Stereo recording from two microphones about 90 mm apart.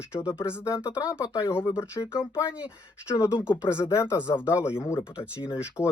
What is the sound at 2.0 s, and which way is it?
Speech, 45° left (ahead or behind).